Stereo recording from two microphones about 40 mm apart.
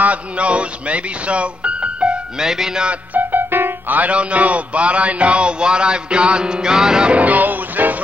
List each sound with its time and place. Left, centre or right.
0.0 s speech: right
2.4 s music: centre
3.2 s music: right
4.0 s a sound: right; by 7.1 s centre
7.1 s music: right